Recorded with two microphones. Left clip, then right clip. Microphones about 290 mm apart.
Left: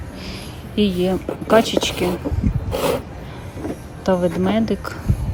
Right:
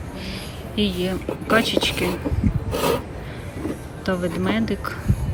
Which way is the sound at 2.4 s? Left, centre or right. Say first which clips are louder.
Even; right.